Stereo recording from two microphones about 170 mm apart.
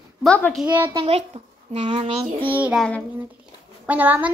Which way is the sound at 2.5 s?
10° right (ahead or behind).